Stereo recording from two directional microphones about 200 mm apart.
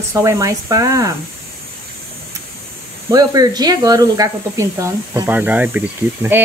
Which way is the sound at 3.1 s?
20° right (ahead or behind).